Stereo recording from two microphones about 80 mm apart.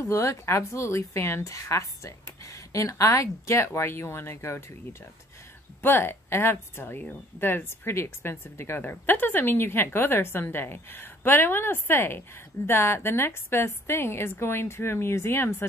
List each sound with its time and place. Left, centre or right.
0.0 s speech: left
5.8 s speech: left